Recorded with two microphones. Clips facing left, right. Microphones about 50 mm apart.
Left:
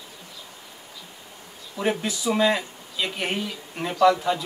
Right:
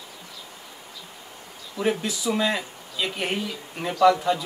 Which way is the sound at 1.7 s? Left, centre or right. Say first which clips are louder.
Even; centre.